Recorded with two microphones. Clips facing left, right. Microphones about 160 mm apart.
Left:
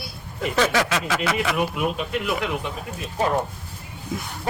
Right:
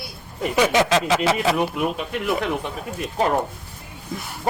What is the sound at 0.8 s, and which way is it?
Speech, 30° right (ahead or behind).